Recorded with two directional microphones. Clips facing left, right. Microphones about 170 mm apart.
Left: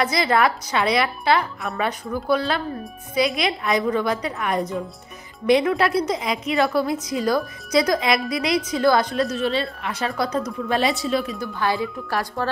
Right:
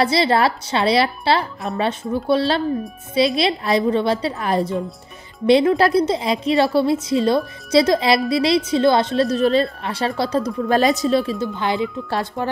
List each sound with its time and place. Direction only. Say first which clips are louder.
0.0 s a woman's voice: right 3 dB; 30° right (ahead or behind)
10.7 s speech: right 5 dB; 40° right (ahead or behind); by 12.4 s 25° right (ahead or behind)